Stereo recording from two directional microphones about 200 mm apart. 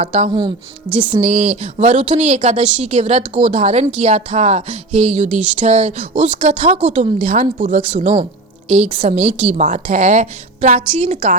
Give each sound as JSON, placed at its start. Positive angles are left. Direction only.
{"t": 0.0, "sound": "a woman's voice", "side_deg": -30}